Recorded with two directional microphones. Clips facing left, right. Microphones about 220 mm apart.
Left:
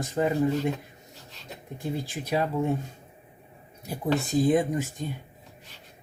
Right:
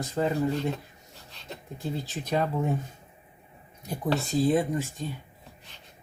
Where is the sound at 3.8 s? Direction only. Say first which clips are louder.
Left 1 dB; 10° left (ahead or behind).